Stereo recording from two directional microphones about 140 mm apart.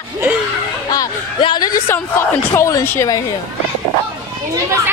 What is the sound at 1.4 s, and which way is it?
A woman's voice, 30° left (ahead or behind).